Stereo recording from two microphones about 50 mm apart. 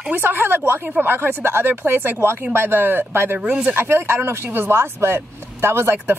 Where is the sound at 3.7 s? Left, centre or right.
Right.